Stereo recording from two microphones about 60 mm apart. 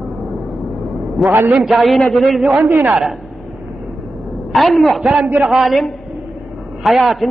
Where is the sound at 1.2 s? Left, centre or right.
Centre.